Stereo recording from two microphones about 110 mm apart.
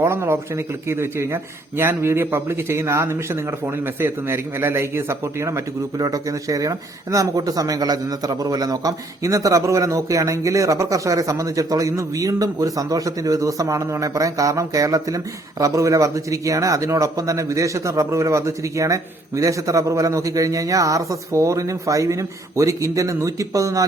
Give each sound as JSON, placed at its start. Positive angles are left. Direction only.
{"t": 0.0, "sound": "speech", "side_deg": -25}